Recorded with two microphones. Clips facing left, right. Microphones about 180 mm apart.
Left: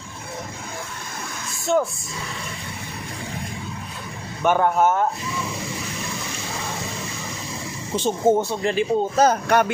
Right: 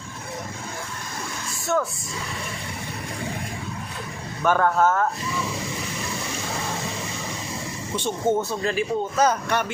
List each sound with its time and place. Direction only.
1.6 s speech: 30° left (ahead or behind)
4.4 s speech: 20° left (ahead or behind)
7.9 s speech: 40° left (ahead or behind)
8.4 s speech: 25° left (ahead or behind)
9.3 s speech: 55° left (ahead or behind)